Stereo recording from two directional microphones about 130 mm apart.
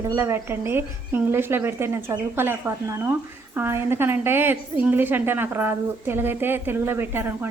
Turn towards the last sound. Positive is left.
turn(degrees=-15)  # may be behind; listen again after turning